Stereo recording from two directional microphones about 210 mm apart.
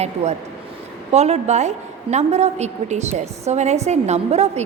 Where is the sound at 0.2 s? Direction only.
30° right (ahead or behind).